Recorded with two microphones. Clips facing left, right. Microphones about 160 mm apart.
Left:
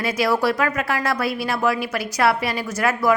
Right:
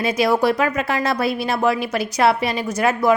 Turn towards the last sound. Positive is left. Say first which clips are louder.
# right 2 dB
turn(degrees=-20)  # may be behind; listen again after turning